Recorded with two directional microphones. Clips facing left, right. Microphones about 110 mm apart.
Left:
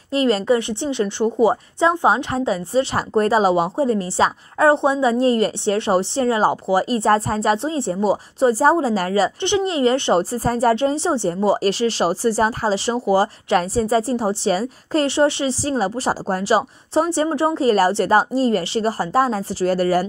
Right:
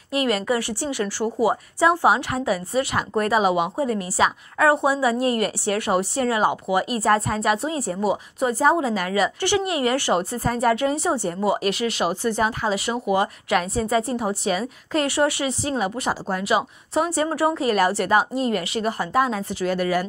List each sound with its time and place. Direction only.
0.1 s a woman's voice: 30° left (ahead or behind)